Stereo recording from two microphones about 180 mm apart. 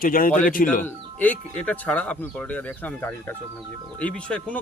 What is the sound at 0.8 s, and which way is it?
Speech, 10° left (ahead or behind).